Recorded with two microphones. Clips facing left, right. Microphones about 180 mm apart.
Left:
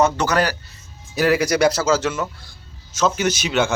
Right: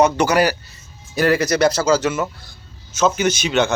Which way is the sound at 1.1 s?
5° left (ahead or behind).